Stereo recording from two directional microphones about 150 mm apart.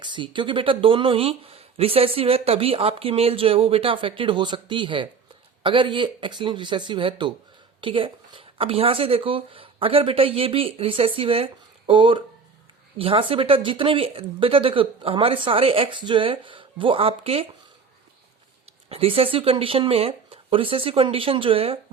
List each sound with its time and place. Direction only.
0.0 s speech: 30° right (ahead or behind)
18.9 s speech: 40° right (ahead or behind)